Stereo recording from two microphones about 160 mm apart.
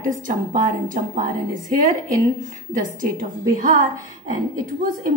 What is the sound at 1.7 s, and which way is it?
A woman's voice, 55° right (ahead or behind).